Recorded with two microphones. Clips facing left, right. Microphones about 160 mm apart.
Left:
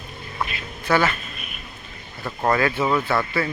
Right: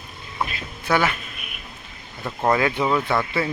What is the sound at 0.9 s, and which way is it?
Speech, 10° right (ahead or behind).